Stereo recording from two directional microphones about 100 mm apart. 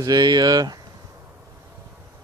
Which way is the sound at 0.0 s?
45° right (ahead or behind).